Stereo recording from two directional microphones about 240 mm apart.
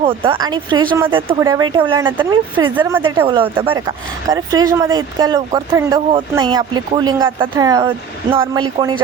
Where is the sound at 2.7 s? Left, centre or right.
Centre.